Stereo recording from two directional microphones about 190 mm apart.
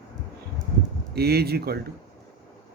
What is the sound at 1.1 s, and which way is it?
Speech, 55° right (ahead or behind).